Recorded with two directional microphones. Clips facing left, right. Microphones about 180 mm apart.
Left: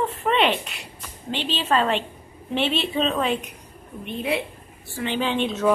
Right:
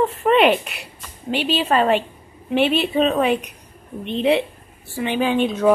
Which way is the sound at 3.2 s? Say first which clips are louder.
Right 5 dB; 15° right (ahead or behind).